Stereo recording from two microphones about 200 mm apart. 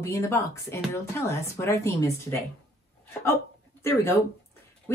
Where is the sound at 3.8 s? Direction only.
10° left (ahead or behind).